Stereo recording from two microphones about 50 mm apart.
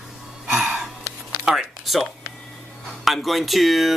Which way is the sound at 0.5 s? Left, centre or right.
Centre.